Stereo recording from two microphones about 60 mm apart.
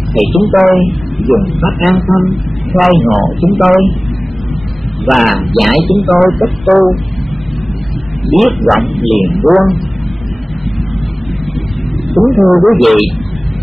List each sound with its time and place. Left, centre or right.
0.1 s a man's voice: centre
5.0 s a man's voice: centre
8.3 s a man's voice: centre
12.4 s a man's voice: centre